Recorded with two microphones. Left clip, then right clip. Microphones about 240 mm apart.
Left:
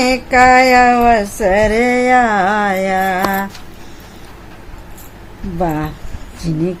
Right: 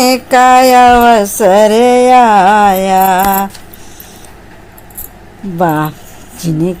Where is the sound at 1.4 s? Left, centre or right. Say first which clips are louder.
Right 8 dB; centre.